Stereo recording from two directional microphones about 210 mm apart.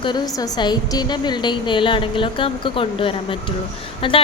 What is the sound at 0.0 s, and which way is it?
A woman's voice, 20° left (ahead or behind).